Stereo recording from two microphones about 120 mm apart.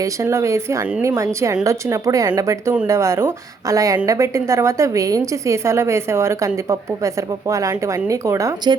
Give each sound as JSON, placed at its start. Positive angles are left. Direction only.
{"t": 0.0, "sound": "a woman's voice", "side_deg": -25}